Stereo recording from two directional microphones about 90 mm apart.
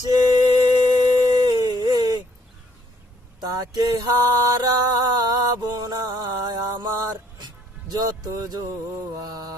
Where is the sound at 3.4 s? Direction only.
45° right (ahead or behind).